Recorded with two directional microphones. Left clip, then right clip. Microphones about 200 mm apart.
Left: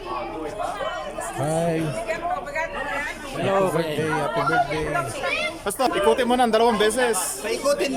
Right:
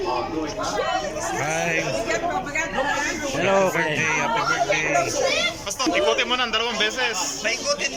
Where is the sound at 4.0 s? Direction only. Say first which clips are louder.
Right 2 dB; 35° left (ahead or behind).